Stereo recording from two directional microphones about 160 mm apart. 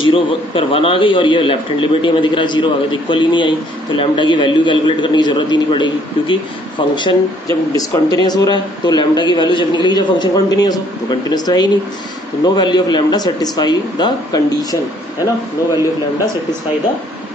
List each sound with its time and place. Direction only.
0.0 s a man's voice: 35° left (ahead or behind)